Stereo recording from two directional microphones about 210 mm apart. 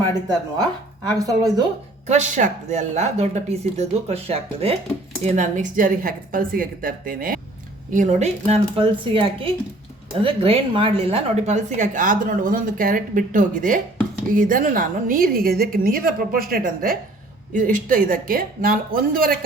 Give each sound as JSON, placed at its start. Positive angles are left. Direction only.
{"t": 1.2, "sound": "speech", "side_deg": -15}
{"t": 2.0, "sound": "a woman's voice", "side_deg": -35}
{"t": 7.9, "sound": "a woman's voice", "side_deg": -30}